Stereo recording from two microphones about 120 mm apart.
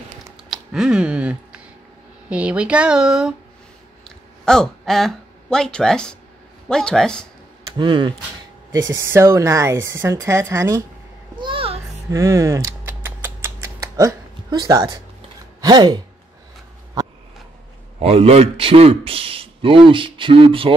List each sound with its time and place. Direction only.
0.5 s a sound: 5° right (ahead or behind)
2.2 s speech: 10° right (ahead or behind)
4.5 s speech: 5° left (ahead or behind)
7.7 s speech: 40° right (ahead or behind)
9.0 s a woman's voice: 20° right (ahead or behind)
11.3 s a sound: 45° right (ahead or behind)
12.1 s rodents: 25° right (ahead or behind)
15.6 s speech: 35° right (ahead or behind)
17.0 s a sound: 30° right (ahead or behind)
17.9 s a man's voice: 55° right (ahead or behind)